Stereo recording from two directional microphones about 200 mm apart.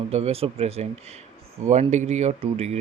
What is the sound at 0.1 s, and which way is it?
Speech, 30° right (ahead or behind).